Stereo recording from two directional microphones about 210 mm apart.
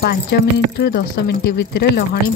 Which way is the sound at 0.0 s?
50° left (ahead or behind).